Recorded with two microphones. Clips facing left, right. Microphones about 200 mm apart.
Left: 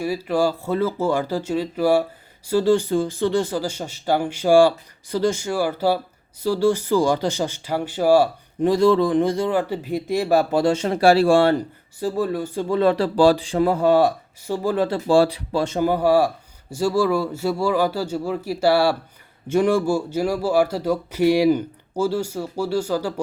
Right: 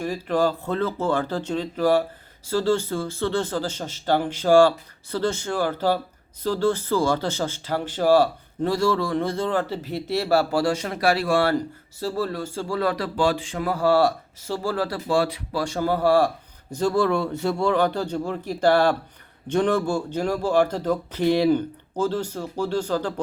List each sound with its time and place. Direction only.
0.0 s speech: 10° left (ahead or behind)